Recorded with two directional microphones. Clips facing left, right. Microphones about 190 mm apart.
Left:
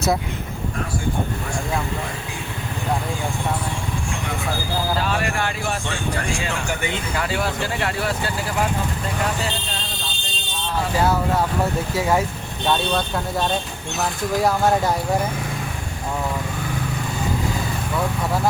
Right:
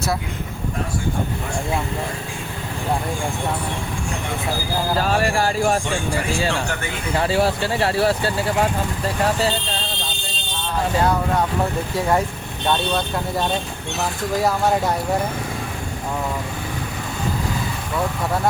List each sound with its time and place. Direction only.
4.9 s speech: 40° right (ahead or behind)
7.1 s speech: 30° right (ahead or behind)
11.9 s speech: 5° left (ahead or behind)